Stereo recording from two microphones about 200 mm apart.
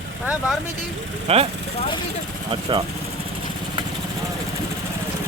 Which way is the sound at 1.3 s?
30° right (ahead or behind).